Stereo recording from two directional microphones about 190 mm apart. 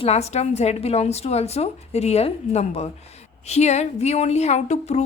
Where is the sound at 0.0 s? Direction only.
35° left (ahead or behind).